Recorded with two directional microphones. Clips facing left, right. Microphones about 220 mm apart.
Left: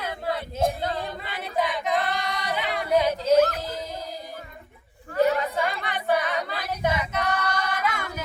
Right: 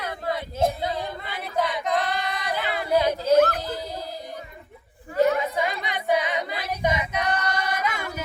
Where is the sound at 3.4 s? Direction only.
55° right (ahead or behind).